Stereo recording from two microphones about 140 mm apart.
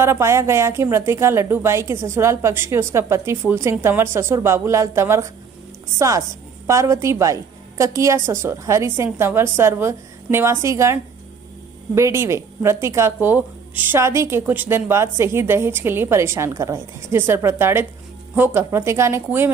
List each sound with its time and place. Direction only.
0.0 s a woman's voice: 20° right (ahead or behind)